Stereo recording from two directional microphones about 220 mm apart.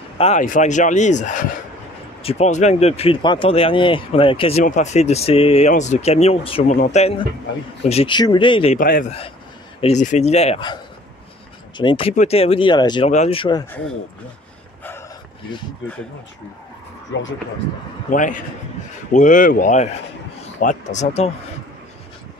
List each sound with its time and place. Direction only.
0.2 s a man's voice: 35° left (ahead or behind)
8.7 s a man's voice: 40° left (ahead or behind); by 13.7 s 20° left (ahead or behind)
14.8 s dog: 10° left (ahead or behind)
18.1 s a man's voice: 35° left (ahead or behind)